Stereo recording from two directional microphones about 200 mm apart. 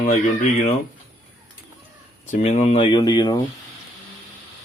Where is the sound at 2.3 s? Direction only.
35° left (ahead or behind); by 3.3 s 20° left (ahead or behind).